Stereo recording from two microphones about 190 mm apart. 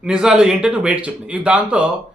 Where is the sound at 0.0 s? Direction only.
5° right (ahead or behind).